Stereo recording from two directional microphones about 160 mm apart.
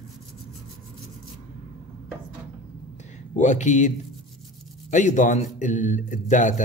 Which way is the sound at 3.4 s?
50° left (ahead or behind).